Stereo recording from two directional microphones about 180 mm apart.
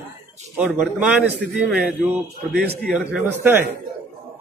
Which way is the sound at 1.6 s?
10° right (ahead or behind).